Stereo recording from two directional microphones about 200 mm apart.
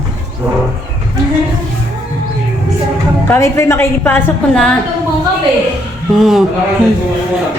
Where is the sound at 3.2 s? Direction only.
10° left (ahead or behind).